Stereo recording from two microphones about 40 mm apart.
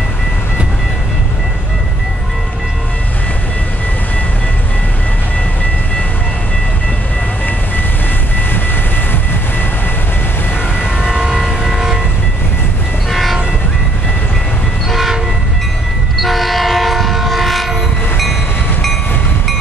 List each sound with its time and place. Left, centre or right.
11.0 s train: right
13.1 s train: centre
14.9 s train: centre
16.2 s train: centre